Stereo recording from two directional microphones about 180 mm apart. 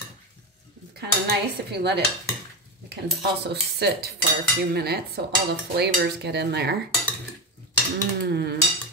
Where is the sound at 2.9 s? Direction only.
65° right (ahead or behind).